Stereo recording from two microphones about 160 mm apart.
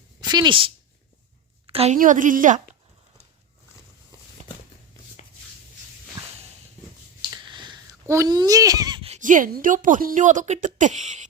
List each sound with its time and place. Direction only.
0.2 s speech: 25° right (ahead or behind)
1.7 s a woman's voice: 40° right (ahead or behind)
2.0 s a woman's voice: 55° right (ahead or behind)
7.3 s finger snapping: 30° right (ahead or behind)
8.0 s a child's voice: 20° right (ahead or behind)
9.0 s a woman's voice: 50° right (ahead or behind)